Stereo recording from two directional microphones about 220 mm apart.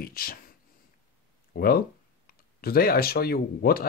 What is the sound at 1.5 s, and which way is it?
Speech, 45° left (ahead or behind).